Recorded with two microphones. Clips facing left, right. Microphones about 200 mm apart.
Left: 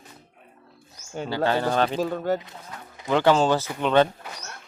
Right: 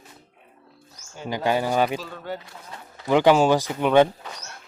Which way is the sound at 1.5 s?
10° right (ahead or behind).